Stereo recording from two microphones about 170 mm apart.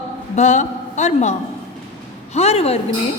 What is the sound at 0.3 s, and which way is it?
A man's voice, 45° left (ahead or behind).